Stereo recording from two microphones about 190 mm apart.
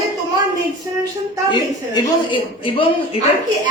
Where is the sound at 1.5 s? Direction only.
25° left (ahead or behind).